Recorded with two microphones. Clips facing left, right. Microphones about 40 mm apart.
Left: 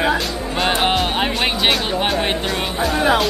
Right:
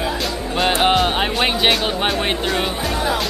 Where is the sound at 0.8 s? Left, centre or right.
Centre.